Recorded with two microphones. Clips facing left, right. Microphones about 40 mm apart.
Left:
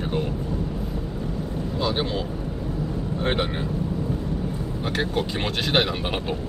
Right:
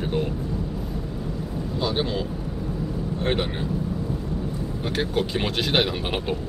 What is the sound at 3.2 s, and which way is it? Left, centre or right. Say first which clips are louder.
Speech: even; centre.